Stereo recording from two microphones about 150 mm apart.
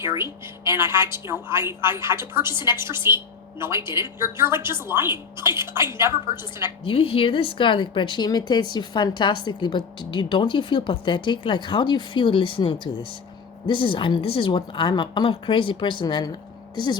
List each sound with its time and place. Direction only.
0.0 s a woman's voice: 15° right (ahead or behind)
6.8 s a woman's voice: 40° left (ahead or behind)